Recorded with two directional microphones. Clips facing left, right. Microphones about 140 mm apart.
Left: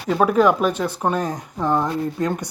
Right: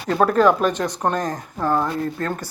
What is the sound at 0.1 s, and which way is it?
Speech, 5° left (ahead or behind).